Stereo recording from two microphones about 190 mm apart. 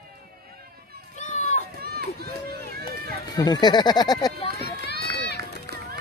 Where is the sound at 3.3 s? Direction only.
20° left (ahead or behind).